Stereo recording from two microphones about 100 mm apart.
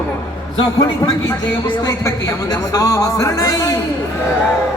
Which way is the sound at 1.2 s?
35° left (ahead or behind).